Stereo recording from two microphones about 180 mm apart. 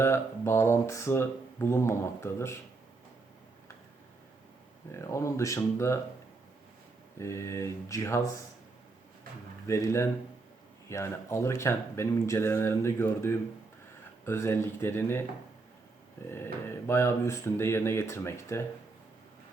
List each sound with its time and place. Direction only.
0.0 s speech: 15° left (ahead or behind)
4.9 s speech: 15° left (ahead or behind)
7.2 s speech: 15° left (ahead or behind)
9.6 s speech: 15° left (ahead or behind)
16.3 s speech: 15° left (ahead or behind)